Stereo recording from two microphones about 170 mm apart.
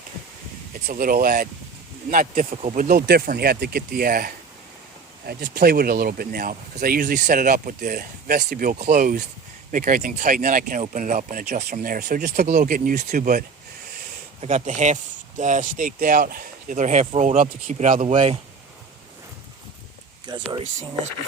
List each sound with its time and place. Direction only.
0.9 s speech: 60° right (ahead or behind)
8.9 s speech: 50° right (ahead or behind)
14.4 s speech: 45° right (ahead or behind)
20.2 s speech: 25° right (ahead or behind)